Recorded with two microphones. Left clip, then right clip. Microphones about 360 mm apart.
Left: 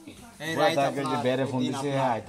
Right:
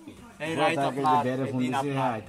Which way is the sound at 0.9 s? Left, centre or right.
Left.